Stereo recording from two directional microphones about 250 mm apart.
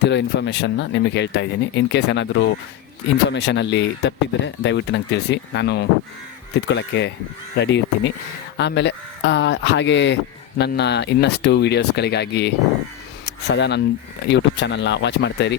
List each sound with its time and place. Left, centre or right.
0.0 s speech: left